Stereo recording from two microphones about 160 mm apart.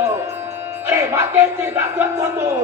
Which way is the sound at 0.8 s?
15° right (ahead or behind).